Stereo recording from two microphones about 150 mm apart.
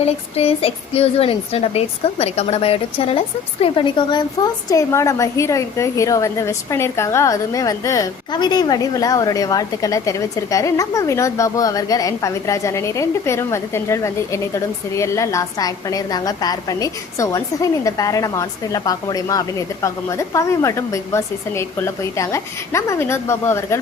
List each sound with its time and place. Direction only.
0.0 s speech: 40° left (ahead or behind)
4.7 s a woman's voice: 20° left (ahead or behind)